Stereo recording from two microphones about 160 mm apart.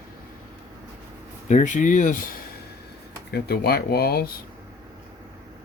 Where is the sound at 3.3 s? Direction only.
80° left.